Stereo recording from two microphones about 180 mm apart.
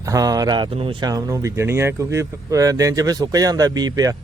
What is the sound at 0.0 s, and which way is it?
Speech, 20° right (ahead or behind).